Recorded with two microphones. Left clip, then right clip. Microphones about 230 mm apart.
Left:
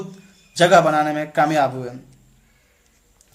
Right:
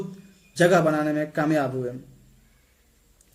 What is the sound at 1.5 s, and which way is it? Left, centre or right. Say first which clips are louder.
Speech: left 5 dB; left.